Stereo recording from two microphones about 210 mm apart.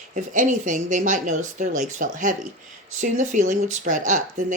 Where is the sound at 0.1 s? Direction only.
35° right (ahead or behind).